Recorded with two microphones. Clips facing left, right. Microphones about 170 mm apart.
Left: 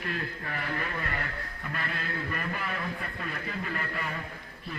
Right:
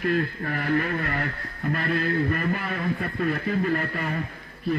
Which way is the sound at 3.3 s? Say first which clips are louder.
Right 12 dB; 45° right (ahead or behind).